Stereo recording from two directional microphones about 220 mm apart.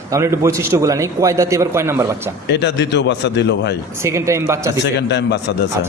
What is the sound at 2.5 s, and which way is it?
A man's voice, 50° left (ahead or behind).